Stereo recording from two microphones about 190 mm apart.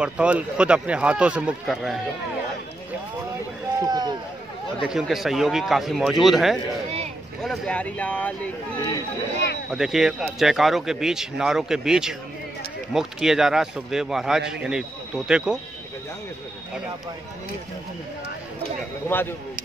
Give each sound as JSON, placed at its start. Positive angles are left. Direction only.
{"t": 0.0, "sound": "speech", "side_deg": -5}
{"t": 3.8, "sound": "run", "side_deg": -20}
{"t": 4.7, "sound": "speech", "side_deg": 0}
{"t": 8.7, "sound": "speech", "side_deg": 20}
{"t": 9.7, "sound": "speech", "side_deg": 0}